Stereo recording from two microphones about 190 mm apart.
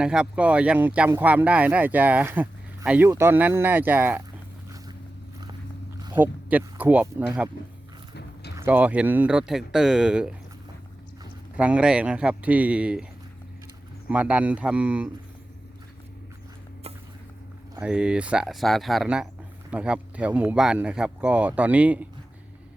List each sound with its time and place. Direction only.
0.0 s speech: 5° right (ahead or behind)
6.0 s a sound: 20° right (ahead or behind)
6.2 s speech: 10° right (ahead or behind)
8.5 s speech: 10° right (ahead or behind)
11.5 s speech: 5° right (ahead or behind)
14.1 s speech: 5° right (ahead or behind)
17.8 s speech: 5° right (ahead or behind)